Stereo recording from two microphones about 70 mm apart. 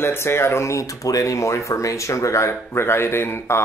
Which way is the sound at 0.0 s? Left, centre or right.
Left.